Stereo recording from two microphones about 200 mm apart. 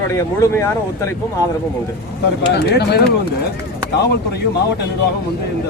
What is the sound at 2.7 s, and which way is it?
Speech, 55° left (ahead or behind).